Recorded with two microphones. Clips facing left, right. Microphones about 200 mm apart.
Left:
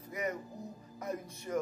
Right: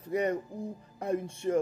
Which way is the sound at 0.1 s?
30° right (ahead or behind).